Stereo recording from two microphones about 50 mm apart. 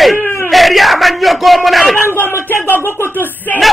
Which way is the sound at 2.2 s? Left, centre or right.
Left.